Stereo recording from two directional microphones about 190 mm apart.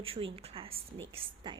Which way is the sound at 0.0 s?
30° right (ahead or behind).